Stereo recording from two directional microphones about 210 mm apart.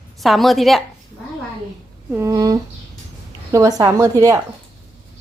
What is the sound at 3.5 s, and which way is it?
Speech, 15° right (ahead or behind).